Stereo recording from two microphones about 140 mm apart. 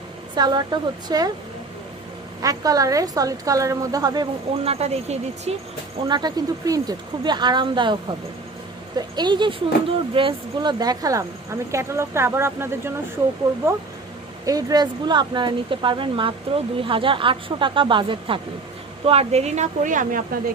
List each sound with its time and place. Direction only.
0.3 s a woman's voice: 30° right (ahead or behind)
2.4 s a woman's voice: 25° right (ahead or behind)
4.6 s speech: 45° right (ahead or behind)
6.1 s speech: 30° right (ahead or behind)
9.0 s a woman's voice: 30° right (ahead or behind)
14.4 s speech: 25° right (ahead or behind); by 20.4 s 75° right (ahead or behind)